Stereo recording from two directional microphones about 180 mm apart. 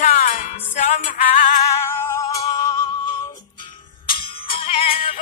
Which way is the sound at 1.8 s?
15° left (ahead or behind).